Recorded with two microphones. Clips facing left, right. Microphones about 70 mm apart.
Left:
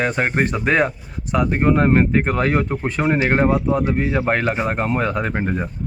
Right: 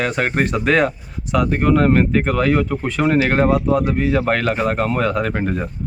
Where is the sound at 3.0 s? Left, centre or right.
Centre.